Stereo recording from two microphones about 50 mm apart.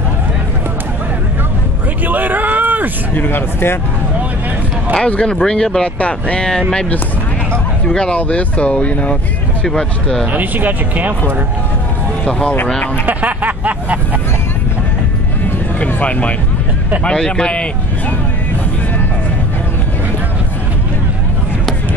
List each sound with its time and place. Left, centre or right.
2.0 s a sound: right
3.2 s speech: left
4.9 s speech: centre
7.9 s speech: centre
9.7 s speech: centre
10.3 s speech: right
12.3 s speech: left
13.0 s a sound: right
15.4 s music: left
17.0 s speech: centre